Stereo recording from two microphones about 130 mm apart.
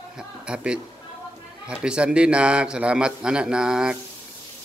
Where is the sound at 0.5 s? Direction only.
10° right (ahead or behind).